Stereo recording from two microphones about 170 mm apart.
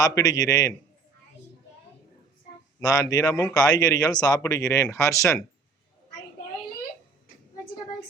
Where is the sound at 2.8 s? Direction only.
20° left (ahead or behind).